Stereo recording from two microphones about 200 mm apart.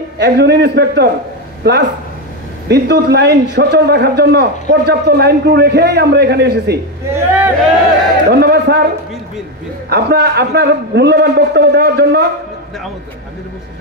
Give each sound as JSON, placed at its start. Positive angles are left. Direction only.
{"t": 0.2, "sound": "a man's voice", "side_deg": -55}
{"t": 7.1, "sound": "speech", "side_deg": -10}
{"t": 8.3, "sound": "a man's voice", "side_deg": -50}
{"t": 9.8, "sound": "a man's voice", "side_deg": -55}